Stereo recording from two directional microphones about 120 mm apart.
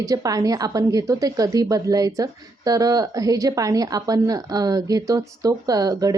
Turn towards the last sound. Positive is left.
turn(degrees=-30)  # may be behind; listen again after turning